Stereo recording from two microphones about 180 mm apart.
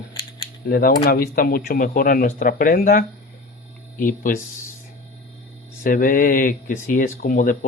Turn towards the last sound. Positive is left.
turn(degrees=50)  # may be behind; listen again after turning